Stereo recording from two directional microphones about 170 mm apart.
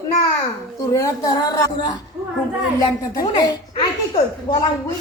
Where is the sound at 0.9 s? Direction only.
20° left (ahead or behind).